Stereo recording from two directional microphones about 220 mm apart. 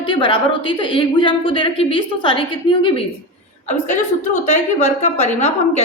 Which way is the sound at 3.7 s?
35° left (ahead or behind).